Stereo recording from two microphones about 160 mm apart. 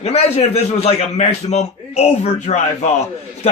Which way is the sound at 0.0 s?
40° left (ahead or behind).